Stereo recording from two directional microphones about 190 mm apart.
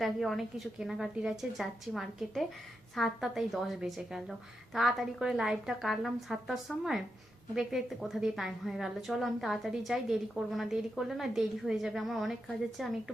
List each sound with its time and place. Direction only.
0.0 s a woman's voice: centre (ahead or behind)